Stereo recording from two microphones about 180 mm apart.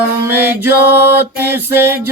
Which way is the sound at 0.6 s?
10° right (ahead or behind).